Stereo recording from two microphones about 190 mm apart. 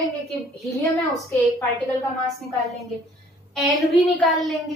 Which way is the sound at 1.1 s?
15° left (ahead or behind).